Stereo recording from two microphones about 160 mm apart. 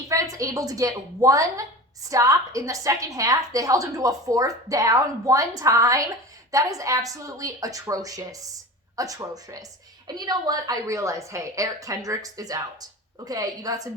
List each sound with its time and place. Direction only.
0.1 s a woman's voice: 20° right (ahead or behind)